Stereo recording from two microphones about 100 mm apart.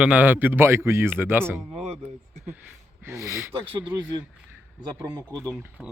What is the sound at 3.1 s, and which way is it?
Speech, 30° right (ahead or behind).